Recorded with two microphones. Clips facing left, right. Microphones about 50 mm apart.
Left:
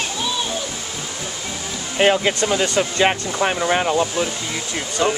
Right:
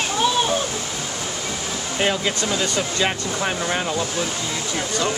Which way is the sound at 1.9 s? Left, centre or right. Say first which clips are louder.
Left 6 dB; left.